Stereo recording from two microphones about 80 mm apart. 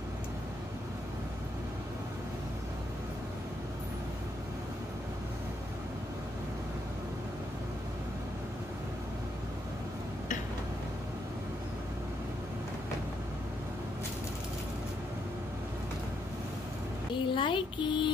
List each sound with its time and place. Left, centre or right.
17.1 s a child's voice: left